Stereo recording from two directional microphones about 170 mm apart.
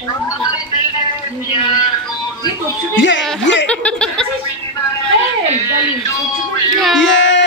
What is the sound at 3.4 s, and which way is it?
Snicker, 90° left.